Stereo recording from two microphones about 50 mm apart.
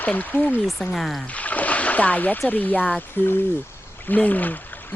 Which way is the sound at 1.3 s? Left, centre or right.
Left.